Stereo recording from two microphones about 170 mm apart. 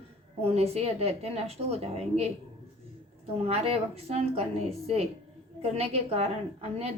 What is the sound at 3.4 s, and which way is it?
A woman's voice, 35° right (ahead or behind).